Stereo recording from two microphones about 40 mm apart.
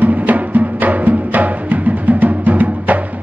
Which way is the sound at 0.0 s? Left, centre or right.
Right.